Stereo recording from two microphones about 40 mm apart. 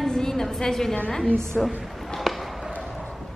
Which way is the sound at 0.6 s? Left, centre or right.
Centre.